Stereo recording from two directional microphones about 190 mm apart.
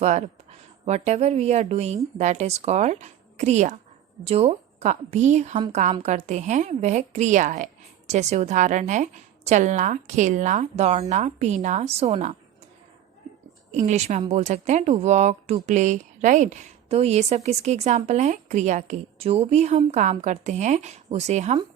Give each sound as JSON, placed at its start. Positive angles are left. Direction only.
{"t": 0.0, "sound": "speech", "side_deg": -35}
{"t": 13.7, "sound": "speech", "side_deg": -40}